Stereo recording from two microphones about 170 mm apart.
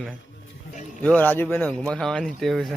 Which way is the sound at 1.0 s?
10° left (ahead or behind).